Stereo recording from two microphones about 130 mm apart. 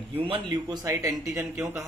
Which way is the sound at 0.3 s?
30° right (ahead or behind).